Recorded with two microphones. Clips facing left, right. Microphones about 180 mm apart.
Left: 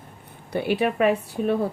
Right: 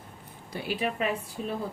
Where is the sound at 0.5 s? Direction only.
60° left (ahead or behind).